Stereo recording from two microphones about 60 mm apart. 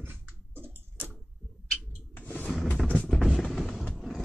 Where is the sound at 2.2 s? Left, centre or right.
Left.